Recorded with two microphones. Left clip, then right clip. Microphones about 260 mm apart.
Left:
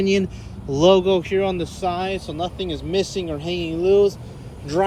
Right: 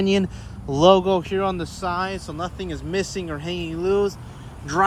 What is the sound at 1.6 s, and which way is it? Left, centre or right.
Speech, right.